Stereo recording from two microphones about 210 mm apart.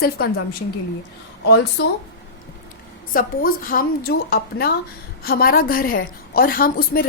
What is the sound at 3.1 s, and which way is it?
A woman's voice, 40° left (ahead or behind).